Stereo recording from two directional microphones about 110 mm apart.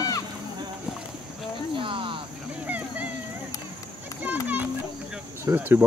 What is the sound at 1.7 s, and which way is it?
Cricket, 50° right (ahead or behind).